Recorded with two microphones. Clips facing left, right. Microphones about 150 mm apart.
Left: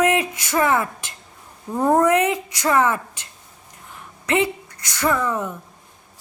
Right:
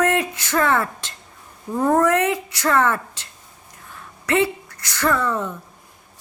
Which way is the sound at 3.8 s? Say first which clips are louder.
Right 1 dB; 20° left (ahead or behind).